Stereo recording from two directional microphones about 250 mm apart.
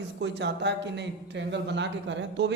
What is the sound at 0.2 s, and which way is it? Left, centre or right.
Speech, right.